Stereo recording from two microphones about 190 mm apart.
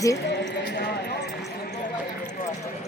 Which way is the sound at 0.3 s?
60° left (ahead or behind).